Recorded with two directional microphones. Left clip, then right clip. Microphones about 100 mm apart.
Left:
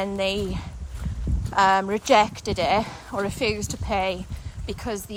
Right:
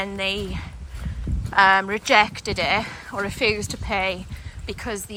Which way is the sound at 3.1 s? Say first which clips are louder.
Right 5 dB; 35° left (ahead or behind).